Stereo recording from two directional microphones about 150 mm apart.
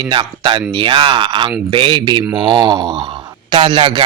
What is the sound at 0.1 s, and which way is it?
Speech, 35° right (ahead or behind).